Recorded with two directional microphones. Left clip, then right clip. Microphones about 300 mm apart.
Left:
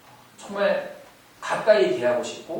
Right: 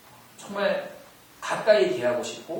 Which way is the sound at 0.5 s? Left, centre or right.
Centre.